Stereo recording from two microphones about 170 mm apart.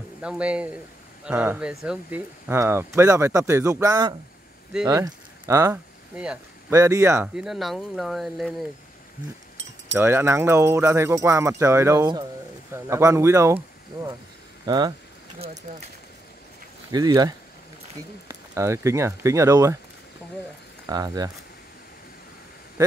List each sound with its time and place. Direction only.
0.2 s speech: 5° right (ahead or behind)
6.1 s speech: 5° right (ahead or behind)
6.7 s speech: 20° right (ahead or behind)
7.3 s speech: centre (ahead or behind)
9.9 s speech: 15° right (ahead or behind)
14.7 s speech: 25° right (ahead or behind)
15.3 s speech: 35° right (ahead or behind)
16.9 s speech: 25° right (ahead or behind)
20.9 s speech: 20° right (ahead or behind)